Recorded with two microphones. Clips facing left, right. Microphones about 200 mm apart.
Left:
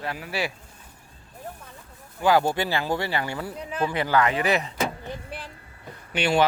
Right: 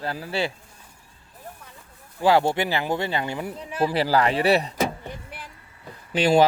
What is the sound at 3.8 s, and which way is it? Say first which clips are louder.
Speech: right 2 dB; 35° right (ahead or behind).